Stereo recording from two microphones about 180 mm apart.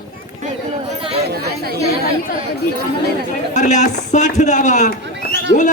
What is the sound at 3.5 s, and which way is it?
A man's voice, 40° left (ahead or behind).